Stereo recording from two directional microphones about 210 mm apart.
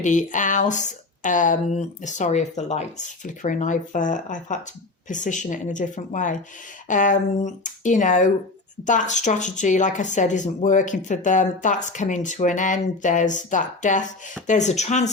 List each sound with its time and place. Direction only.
0.0 s speech: 35° left (ahead or behind)